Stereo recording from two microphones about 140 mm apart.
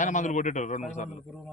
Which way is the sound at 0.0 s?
60° left (ahead or behind).